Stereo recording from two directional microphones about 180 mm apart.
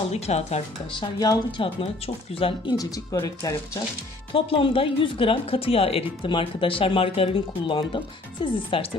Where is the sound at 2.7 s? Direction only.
20° left (ahead or behind).